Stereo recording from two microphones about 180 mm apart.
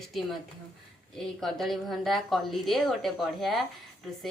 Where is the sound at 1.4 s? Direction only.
Centre (ahead or behind).